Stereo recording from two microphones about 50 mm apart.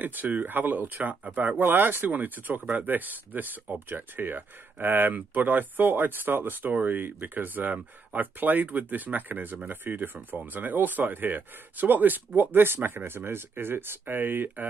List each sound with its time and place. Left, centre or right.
0.0 s speech: right
1.6 s speech: right